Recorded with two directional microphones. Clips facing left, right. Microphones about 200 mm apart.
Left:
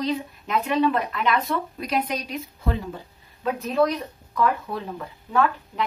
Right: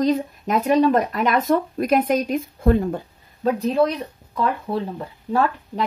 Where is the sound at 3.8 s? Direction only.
30° right (ahead or behind).